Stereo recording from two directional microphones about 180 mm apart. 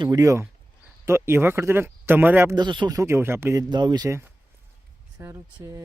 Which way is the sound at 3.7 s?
25° right (ahead or behind).